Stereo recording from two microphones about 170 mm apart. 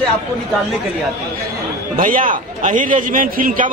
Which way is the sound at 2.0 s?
50° right (ahead or behind).